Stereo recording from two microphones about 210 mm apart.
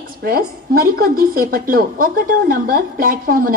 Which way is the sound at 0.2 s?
45° right (ahead or behind).